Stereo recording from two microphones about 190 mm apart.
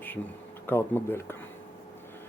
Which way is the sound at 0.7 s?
10° left (ahead or behind).